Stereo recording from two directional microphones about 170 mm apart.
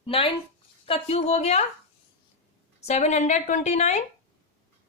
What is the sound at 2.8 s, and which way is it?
A woman's voice, 45° left (ahead or behind).